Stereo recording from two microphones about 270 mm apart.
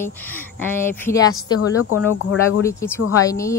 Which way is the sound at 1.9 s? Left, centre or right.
Left.